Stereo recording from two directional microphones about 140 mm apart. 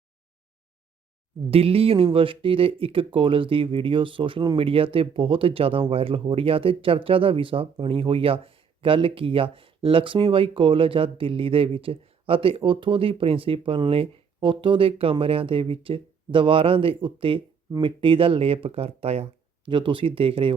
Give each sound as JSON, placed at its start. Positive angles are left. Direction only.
{"t": 1.5, "sound": "speech", "side_deg": -45}
{"t": 19.6, "sound": "speech", "side_deg": -35}